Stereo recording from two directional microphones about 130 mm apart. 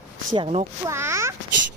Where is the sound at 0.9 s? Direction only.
20° right (ahead or behind).